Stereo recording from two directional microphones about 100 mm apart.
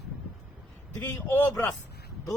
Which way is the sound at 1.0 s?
20° left (ahead or behind).